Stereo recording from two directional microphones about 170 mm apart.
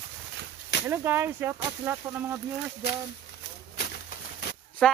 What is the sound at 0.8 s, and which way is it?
Speech, 15° right (ahead or behind).